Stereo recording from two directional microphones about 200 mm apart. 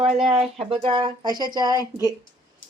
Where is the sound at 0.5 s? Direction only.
30° right (ahead or behind).